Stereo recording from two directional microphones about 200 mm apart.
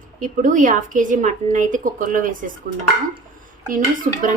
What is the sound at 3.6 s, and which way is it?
Speech, 45° right (ahead or behind).